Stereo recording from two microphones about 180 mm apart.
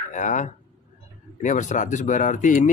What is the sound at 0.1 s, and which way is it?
Speech, 45° left (ahead or behind).